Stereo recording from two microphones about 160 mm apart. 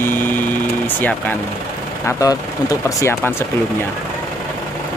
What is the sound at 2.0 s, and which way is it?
Speech, 20° left (ahead or behind).